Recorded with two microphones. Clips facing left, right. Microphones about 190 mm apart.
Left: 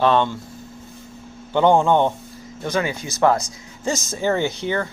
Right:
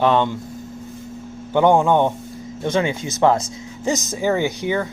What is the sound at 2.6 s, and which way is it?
Speech, 25° right (ahead or behind).